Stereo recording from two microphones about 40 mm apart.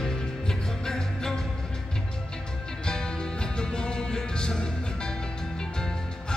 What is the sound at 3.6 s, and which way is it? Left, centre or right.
Music, left.